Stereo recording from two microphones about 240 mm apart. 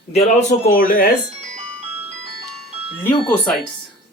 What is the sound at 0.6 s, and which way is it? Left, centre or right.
Speech, left.